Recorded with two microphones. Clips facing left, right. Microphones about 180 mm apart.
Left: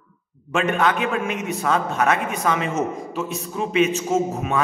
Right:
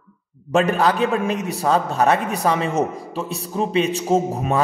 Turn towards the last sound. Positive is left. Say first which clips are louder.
# right 2 dB
turn(degrees=-35)  # may be behind; listen again after turning